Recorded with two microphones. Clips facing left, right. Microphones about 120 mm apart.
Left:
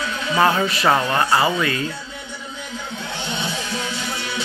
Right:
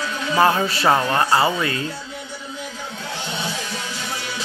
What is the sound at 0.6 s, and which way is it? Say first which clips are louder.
Speech: even; 30° right (ahead or behind).